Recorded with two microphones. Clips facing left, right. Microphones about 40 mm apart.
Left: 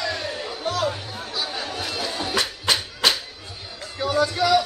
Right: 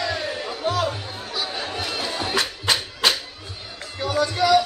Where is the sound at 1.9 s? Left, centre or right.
Centre.